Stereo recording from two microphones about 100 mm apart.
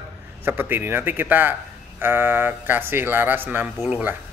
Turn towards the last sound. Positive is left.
turn(degrees=-15)  # may be behind; listen again after turning